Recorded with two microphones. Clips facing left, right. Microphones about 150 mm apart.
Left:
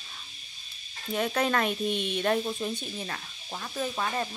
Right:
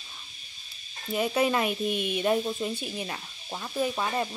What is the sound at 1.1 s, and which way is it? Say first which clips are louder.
Speech: right 2 dB; 5° right (ahead or behind).